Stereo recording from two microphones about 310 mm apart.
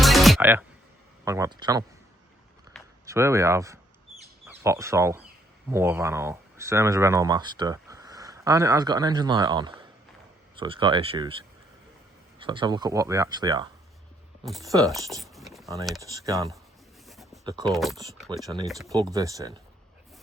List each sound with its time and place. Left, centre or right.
0.0 s music: centre
1.2 s speech: centre
2.8 s a sound: centre
3.1 s speech: centre
12.4 s speech: centre
14.4 s speech: centre
14.7 s speech: centre
15.2 s a sound: centre
16.0 s speech: centre
17.1 s a sound: centre
17.7 s speech: centre
18.4 s speech: centre